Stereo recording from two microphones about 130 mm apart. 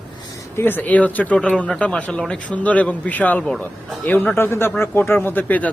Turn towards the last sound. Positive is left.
turn(degrees=10)  # may be behind; listen again after turning